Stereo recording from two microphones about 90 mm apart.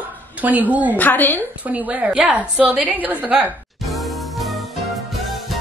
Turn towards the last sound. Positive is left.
turn(degrees=0)  # may be behind; listen again after turning